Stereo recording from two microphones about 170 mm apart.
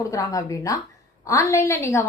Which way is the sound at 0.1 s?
20° left (ahead or behind).